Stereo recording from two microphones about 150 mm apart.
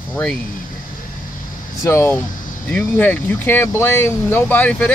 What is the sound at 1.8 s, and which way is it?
Speech, 15° left (ahead or behind).